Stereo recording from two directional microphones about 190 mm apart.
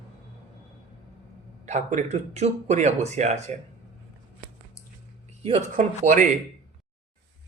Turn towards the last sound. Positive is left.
turn(degrees=-40)  # may be behind; listen again after turning